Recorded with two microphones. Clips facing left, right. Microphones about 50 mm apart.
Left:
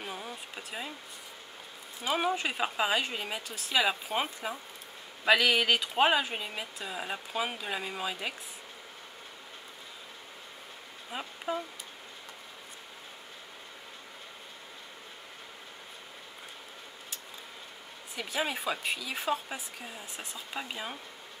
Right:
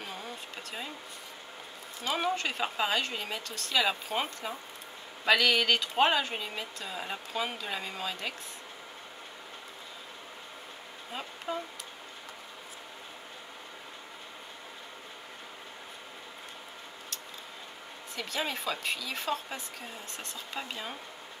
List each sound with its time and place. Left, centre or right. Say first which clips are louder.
0.0 s a sound: left 1 dB; centre
2.0 s speech: left 1 dB; centre
11.1 s speech: left 2 dB; centre
18.1 s speech: left 1 dB; centre